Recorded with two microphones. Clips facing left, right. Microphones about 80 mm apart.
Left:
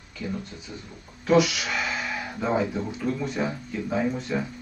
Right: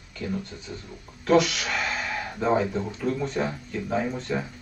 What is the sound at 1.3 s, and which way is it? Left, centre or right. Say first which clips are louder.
Speech: even; centre.